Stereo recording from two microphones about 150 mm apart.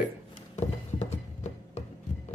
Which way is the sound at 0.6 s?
50° left (ahead or behind).